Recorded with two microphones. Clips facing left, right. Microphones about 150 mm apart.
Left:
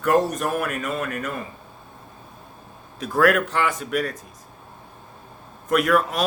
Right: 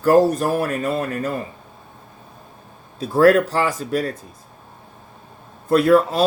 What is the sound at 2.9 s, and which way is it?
Speech, 30° right (ahead or behind).